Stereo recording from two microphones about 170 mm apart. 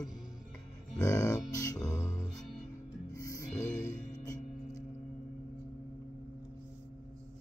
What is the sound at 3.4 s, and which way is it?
Music, 45° left (ahead or behind).